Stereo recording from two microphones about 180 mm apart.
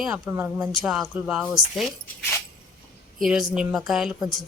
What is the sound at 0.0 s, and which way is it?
Speech, 5° right (ahead or behind).